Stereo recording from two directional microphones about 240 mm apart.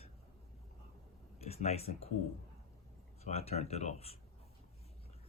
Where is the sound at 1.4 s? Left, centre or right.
Left.